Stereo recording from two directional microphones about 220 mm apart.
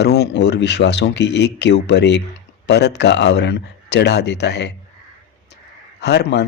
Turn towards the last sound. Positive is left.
turn(degrees=50)  # may be behind; listen again after turning